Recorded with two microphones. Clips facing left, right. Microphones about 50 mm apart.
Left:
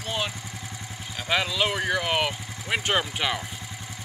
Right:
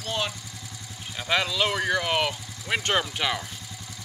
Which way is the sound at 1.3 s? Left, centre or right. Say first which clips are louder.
Even; centre.